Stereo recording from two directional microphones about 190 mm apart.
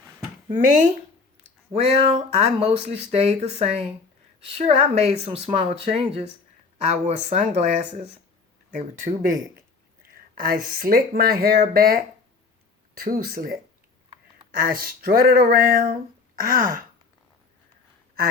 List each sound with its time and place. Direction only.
1.4 s speech: 30° right (ahead or behind)
10.3 s speech: 50° right (ahead or behind)